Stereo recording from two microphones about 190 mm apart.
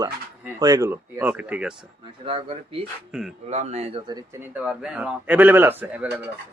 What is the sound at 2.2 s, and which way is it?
A man's voice, 30° right (ahead or behind).